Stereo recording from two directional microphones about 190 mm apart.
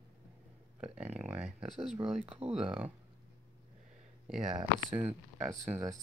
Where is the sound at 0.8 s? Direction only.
5° right (ahead or behind).